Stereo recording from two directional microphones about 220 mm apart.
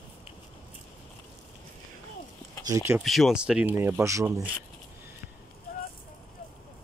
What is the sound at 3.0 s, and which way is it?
Speech, centre (ahead or behind).